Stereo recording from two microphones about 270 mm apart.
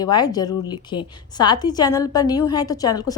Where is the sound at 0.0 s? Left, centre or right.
Centre.